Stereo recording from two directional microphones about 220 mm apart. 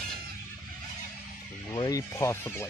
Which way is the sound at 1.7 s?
15° left (ahead or behind).